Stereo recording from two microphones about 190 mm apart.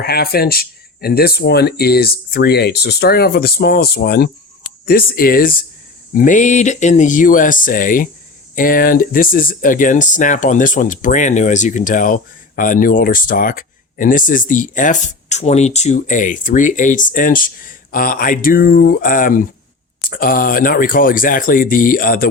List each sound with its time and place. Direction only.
0.0 s speech: 55° left (ahead or behind)